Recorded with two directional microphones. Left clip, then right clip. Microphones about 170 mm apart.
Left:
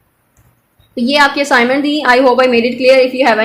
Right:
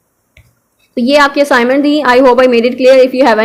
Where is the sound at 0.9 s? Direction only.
25° right (ahead or behind).